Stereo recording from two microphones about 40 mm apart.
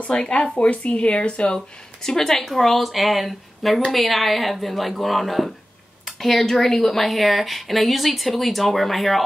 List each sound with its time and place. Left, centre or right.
0.1 s speech: left
2.0 s speech: centre